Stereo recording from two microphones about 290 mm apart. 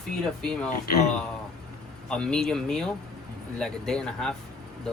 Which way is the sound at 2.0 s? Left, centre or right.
Centre.